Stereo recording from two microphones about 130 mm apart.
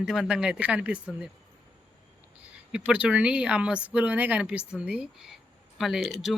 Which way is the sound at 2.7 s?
10° right (ahead or behind).